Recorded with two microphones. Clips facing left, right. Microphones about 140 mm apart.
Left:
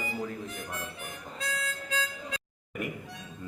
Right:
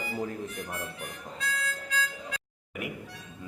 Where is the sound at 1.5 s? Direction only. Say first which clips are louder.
Even; 20° left (ahead or behind).